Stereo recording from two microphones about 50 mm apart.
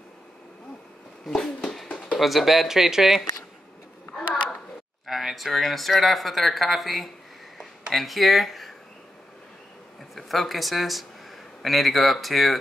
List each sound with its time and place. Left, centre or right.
1.3 s speech: centre
1.9 s a sound: left
2.1 s speech: centre
5.0 s speech: centre
10.1 s speech: centre